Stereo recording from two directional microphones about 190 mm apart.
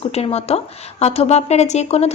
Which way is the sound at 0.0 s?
30° left (ahead or behind).